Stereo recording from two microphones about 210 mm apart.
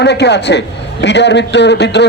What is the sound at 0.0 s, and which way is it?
A man's voice, 55° left (ahead or behind).